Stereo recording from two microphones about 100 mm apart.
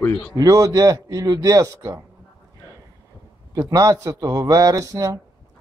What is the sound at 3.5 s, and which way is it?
A man's voice, 35° right (ahead or behind).